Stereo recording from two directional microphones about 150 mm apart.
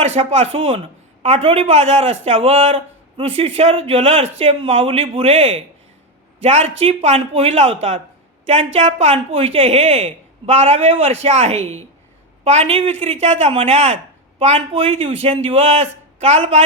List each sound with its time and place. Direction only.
0.0 s a man's voice: 40° right (ahead or behind)